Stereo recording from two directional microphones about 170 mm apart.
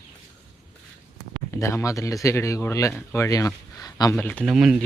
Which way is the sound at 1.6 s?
15° left (ahead or behind).